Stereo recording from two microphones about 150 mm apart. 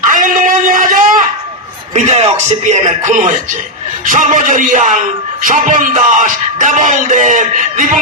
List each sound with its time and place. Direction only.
0.1 s a sound: 60° right (ahead or behind)
2.1 s music: 50° right (ahead or behind)
4.0 s speech: 60° right (ahead or behind)